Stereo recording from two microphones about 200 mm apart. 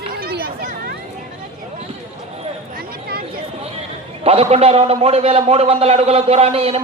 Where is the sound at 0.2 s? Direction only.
50° right (ahead or behind).